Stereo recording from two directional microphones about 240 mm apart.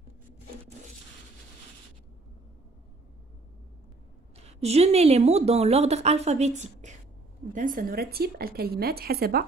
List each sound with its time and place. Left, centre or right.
4.4 s a woman's voice: right